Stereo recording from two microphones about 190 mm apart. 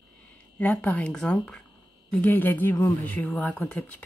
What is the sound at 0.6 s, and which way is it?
Speech, 10° left (ahead or behind).